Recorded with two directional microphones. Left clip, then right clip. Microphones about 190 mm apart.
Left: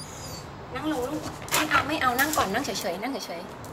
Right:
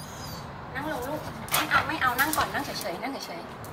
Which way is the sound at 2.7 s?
70° left (ahead or behind).